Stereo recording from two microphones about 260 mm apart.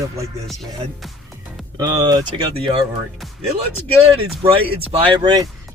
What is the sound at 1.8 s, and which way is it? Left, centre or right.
Speech, centre.